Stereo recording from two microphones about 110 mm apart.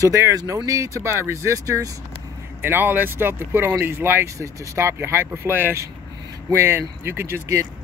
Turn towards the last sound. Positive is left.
turn(degrees=-25)  # may be behind; listen again after turning